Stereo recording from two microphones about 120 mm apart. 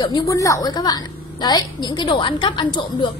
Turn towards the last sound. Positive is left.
turn(degrees=40)  # may be behind; listen again after turning